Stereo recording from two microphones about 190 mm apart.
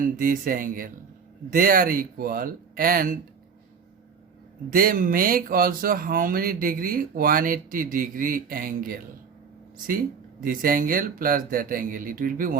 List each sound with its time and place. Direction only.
0.0 s speech: 45° right (ahead or behind)
4.7 s speech: 50° right (ahead or behind)
10.4 s speech: 45° right (ahead or behind)